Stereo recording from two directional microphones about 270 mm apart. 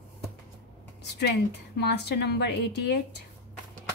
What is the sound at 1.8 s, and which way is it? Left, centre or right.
A woman's voice, left.